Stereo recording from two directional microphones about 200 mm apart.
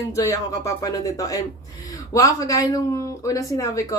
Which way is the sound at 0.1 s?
15° left (ahead or behind).